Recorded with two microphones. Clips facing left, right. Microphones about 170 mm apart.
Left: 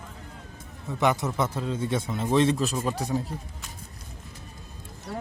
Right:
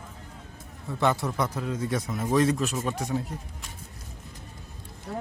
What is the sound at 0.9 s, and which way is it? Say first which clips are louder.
A man's voice: left 1 dB; 15° left (ahead or behind).